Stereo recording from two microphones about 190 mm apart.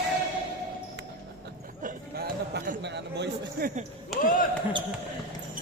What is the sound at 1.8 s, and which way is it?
Chatter, 50° right (ahead or behind).